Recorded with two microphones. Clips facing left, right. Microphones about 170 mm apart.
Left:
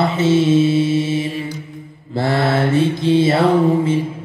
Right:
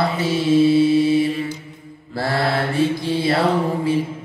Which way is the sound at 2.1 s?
20° left (ahead or behind).